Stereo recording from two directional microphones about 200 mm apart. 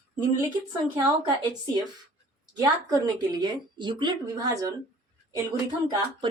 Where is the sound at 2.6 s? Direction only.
20° right (ahead or behind).